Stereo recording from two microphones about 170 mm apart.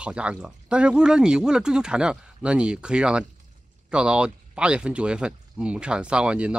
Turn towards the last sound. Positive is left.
turn(degrees=-5)  # may be behind; listen again after turning